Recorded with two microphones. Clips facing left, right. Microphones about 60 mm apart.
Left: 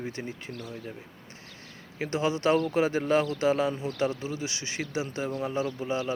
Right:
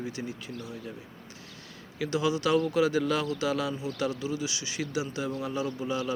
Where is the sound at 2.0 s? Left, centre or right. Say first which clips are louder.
Even; left.